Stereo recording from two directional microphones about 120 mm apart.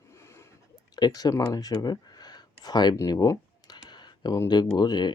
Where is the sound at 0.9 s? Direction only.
35° left (ahead or behind).